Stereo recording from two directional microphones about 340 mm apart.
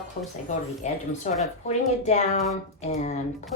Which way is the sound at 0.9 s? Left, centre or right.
Centre.